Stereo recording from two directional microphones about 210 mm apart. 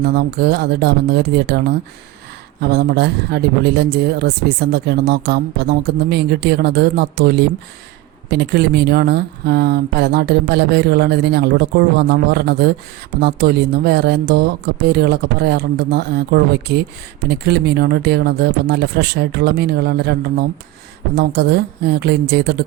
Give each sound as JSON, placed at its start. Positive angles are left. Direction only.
{"t": 0.0, "sound": "speech", "side_deg": -50}